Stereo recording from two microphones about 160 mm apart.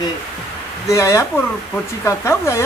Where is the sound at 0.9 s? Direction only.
20° left (ahead or behind).